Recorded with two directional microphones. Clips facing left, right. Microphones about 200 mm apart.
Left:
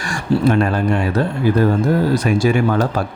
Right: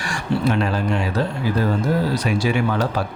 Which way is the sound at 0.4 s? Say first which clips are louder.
Left 5 dB; 50° left (ahead or behind).